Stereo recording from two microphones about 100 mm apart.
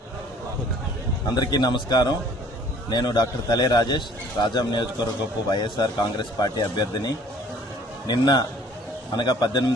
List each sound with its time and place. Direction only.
1.4 s a man's voice: 45° left (ahead or behind)